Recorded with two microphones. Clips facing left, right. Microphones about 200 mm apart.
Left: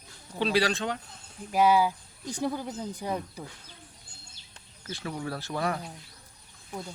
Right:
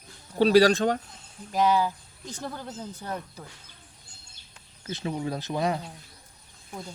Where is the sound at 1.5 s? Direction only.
10° left (ahead or behind).